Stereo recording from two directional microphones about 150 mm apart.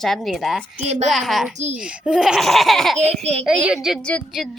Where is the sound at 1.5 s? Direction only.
50° right (ahead or behind).